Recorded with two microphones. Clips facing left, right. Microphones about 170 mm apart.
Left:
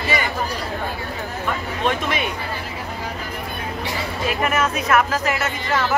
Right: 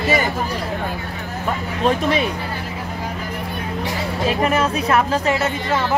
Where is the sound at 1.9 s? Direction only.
35° right (ahead or behind).